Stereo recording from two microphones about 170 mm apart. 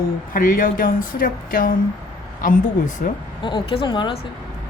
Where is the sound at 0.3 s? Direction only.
55° left (ahead or behind).